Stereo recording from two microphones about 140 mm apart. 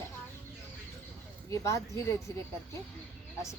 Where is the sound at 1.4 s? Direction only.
20° left (ahead or behind).